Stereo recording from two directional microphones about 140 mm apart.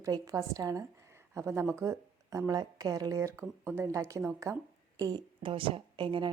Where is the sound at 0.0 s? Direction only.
25° right (ahead or behind).